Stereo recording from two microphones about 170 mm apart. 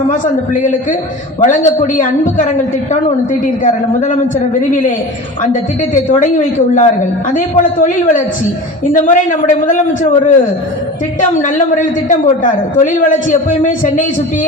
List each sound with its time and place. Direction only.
0.1 s a man's voice: 50° left (ahead or behind)
5.9 s a man's voice: 45° left (ahead or behind)
12.0 s a man's voice: 45° left (ahead or behind)